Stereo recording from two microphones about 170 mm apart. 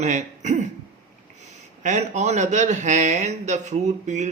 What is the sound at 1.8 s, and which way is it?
A man's voice, 45° right (ahead or behind).